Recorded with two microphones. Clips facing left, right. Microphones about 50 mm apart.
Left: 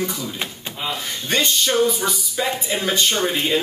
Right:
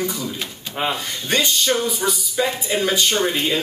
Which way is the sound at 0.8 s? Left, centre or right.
Right.